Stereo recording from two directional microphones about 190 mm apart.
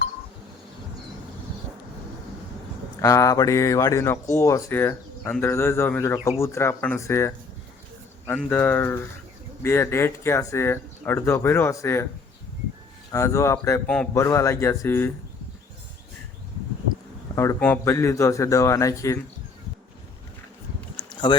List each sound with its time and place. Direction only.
3.0 s speech: 15° left (ahead or behind)
8.4 s speech: 10° left (ahead or behind)
13.1 s speech: 15° left (ahead or behind)
14.2 s speech: 15° left (ahead or behind)
17.3 s speech: 15° left (ahead or behind)
21.1 s a sound: 25° left (ahead or behind)